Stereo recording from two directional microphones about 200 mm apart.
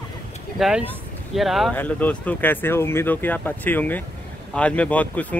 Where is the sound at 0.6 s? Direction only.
5° right (ahead or behind).